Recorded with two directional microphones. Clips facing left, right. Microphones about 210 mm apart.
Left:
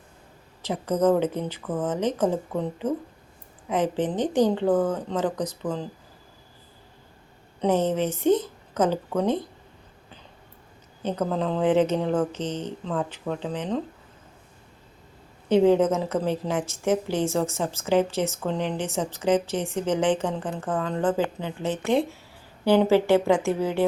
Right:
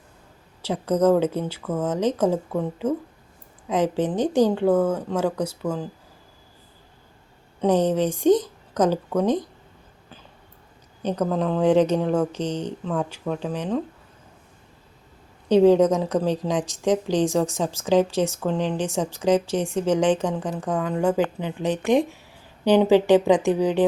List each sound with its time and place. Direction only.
0.6 s a woman's voice: 10° right (ahead or behind)
7.6 s a woman's voice: 15° right (ahead or behind)
11.3 s a woman's voice: 10° right (ahead or behind)
15.4 s a woman's voice: 15° right (ahead or behind)